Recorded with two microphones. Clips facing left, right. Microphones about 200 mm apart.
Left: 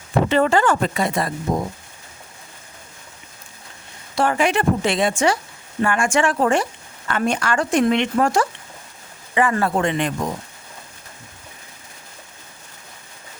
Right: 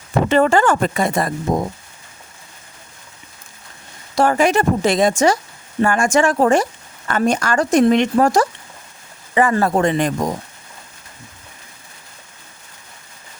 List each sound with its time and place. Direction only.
0.3 s speech: 50° right (ahead or behind)
4.1 s speech: 40° right (ahead or behind)